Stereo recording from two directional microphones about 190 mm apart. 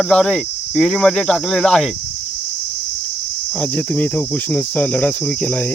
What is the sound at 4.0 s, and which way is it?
Cricket, 5° left (ahead or behind).